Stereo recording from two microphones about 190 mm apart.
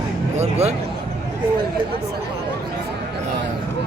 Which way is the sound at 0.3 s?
35° right (ahead or behind).